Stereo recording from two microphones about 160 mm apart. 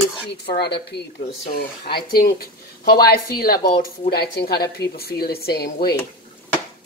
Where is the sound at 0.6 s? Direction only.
90° left.